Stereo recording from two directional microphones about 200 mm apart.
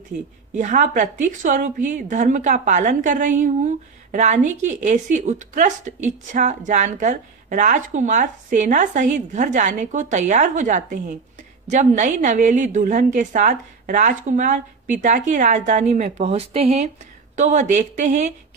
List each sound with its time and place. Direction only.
0.6 s a woman's voice: 40° right (ahead or behind)